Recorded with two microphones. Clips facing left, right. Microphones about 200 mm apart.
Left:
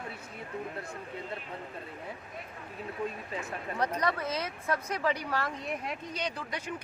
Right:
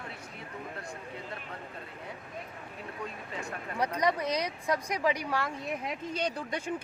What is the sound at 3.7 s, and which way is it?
Speech, 10° right (ahead or behind).